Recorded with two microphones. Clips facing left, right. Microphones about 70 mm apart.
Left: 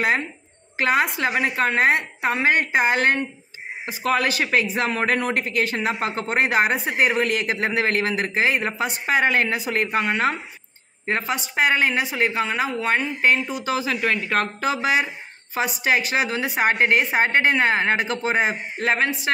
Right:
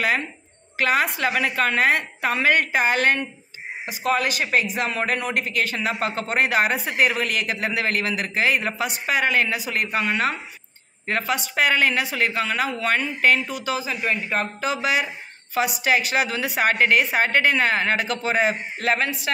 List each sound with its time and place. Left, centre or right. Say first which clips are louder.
0.7 s a woman's voice: left 1 dB; left
4.2 s a woman's voice: left 1 dB; left
13.7 s speech: left 4 dB; left
14.6 s a woman's voice: left 2 dB; left